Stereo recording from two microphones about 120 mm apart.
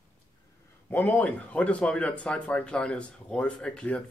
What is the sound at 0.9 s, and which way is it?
Speech, 15° left (ahead or behind).